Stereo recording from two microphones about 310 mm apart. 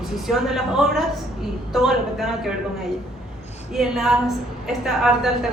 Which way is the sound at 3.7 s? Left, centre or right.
Centre.